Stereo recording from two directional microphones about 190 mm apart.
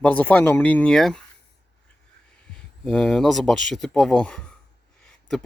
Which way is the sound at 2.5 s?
5° left (ahead or behind).